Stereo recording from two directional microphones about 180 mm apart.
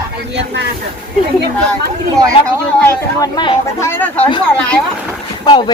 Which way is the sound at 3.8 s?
15° left (ahead or behind).